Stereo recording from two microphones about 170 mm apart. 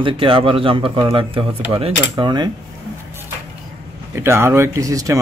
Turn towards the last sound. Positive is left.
turn(degrees=-20)  # may be behind; listen again after turning